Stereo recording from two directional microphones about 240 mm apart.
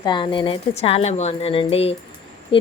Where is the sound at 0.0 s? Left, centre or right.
Centre.